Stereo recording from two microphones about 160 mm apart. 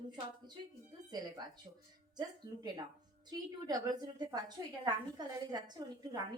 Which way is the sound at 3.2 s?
25° right (ahead or behind).